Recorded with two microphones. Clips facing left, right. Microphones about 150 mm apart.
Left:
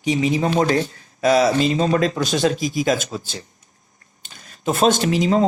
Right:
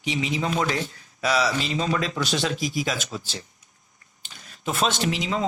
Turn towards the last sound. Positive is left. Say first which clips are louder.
# left 8 dB
turn(degrees=45)  # may be behind; listen again after turning